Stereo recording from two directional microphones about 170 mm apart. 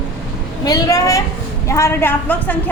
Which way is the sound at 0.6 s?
20° left (ahead or behind).